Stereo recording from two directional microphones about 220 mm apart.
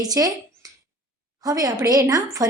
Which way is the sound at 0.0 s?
15° right (ahead or behind).